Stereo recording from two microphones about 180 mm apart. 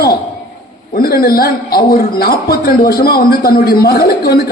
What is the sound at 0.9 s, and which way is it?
A man's voice, 55° left (ahead or behind).